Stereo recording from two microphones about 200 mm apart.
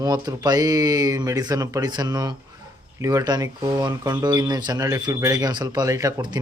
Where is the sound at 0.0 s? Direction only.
20° right (ahead or behind).